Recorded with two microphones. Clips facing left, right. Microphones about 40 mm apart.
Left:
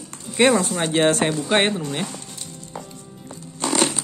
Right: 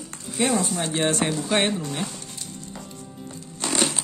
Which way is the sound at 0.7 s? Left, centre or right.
Left.